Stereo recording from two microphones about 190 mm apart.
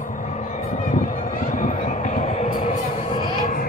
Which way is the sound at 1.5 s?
40° left (ahead or behind).